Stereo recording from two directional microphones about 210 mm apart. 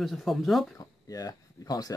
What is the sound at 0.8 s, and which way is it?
Speech, 15° left (ahead or behind).